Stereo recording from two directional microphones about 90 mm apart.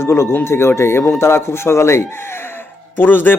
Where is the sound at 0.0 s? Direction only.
30° left (ahead or behind).